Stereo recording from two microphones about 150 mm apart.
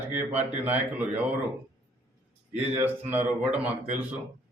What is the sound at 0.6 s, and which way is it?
Speech, 10° right (ahead or behind).